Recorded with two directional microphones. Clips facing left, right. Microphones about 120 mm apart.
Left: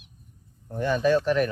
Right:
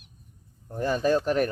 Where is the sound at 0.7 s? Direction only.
35° right (ahead or behind).